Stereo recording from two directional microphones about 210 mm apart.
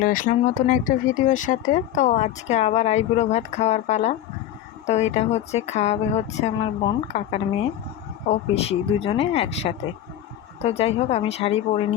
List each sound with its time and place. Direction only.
0.0 s speech: 40° left (ahead or behind)